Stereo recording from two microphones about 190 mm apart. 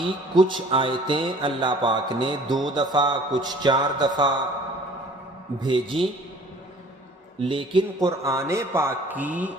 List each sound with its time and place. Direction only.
0.0 s music: 25° right (ahead or behind)
5.5 s music: 25° right (ahead or behind)
7.3 s a man's voice: 25° right (ahead or behind); by 9.6 s 10° right (ahead or behind)